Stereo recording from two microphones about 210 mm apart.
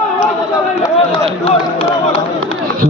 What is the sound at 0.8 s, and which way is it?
Speech, 25° left (ahead or behind).